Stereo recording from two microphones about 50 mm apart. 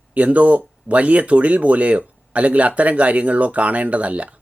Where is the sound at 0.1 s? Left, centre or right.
Right.